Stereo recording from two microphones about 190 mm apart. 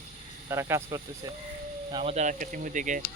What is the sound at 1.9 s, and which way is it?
Speech, 30° right (ahead or behind).